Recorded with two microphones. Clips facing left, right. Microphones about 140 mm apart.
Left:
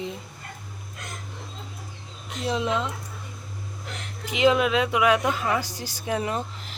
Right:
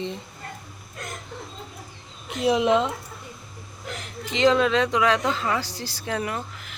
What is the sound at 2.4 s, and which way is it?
Speech, 15° right (ahead or behind).